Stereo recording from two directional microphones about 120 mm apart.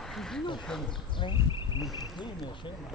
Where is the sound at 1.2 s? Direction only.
40° left (ahead or behind).